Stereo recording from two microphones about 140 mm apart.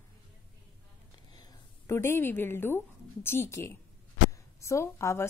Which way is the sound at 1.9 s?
20° left (ahead or behind).